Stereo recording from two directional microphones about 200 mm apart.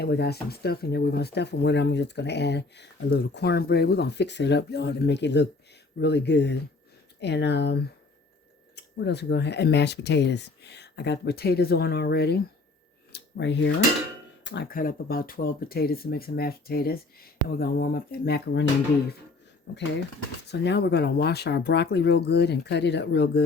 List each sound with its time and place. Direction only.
0.0 s speech: 55° left (ahead or behind)
19.7 s speech: 60° left (ahead or behind)